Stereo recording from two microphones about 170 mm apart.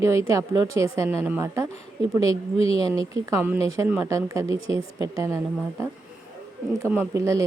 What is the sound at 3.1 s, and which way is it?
Speech, 15° right (ahead or behind).